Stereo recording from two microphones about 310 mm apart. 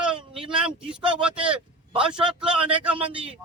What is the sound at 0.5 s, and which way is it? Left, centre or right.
Speech, centre.